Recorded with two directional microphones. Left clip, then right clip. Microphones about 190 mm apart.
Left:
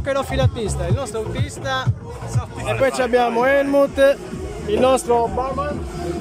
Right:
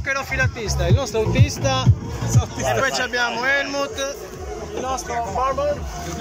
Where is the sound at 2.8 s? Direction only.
30° left (ahead or behind).